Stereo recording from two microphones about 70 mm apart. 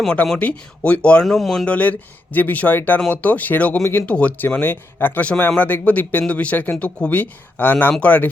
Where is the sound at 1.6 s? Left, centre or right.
Left.